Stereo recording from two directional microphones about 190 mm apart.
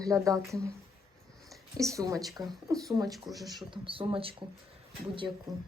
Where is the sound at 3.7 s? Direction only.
25° right (ahead or behind).